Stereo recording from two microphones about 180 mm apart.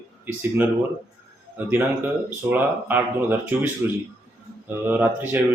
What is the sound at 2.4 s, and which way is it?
Speech, 10° right (ahead or behind).